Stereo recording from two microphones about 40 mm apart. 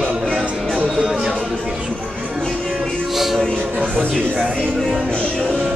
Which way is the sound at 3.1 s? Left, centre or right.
Centre.